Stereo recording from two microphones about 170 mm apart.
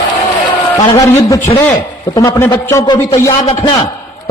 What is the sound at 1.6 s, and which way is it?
A man's voice, 15° left (ahead or behind).